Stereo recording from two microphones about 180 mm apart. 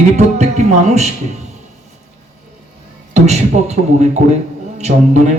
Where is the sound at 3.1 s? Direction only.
40° right (ahead or behind).